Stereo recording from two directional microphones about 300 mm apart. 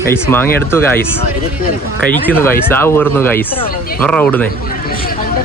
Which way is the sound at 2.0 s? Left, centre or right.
Centre.